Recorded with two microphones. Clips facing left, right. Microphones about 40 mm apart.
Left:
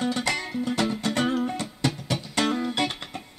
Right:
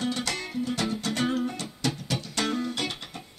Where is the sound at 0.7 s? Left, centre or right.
Centre.